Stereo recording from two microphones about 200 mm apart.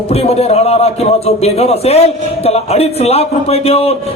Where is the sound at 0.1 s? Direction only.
30° left (ahead or behind).